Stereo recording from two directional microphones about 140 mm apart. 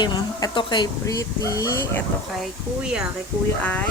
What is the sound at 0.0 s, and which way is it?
Speech, 30° left (ahead or behind).